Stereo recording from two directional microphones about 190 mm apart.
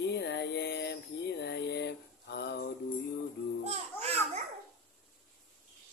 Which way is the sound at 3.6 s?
35° right (ahead or behind).